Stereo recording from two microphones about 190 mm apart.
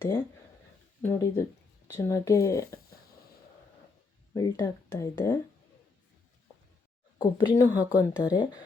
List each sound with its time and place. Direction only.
1.0 s speech: 15° left (ahead or behind)
4.4 s speech: 20° left (ahead or behind)
7.2 s speech: 20° left (ahead or behind)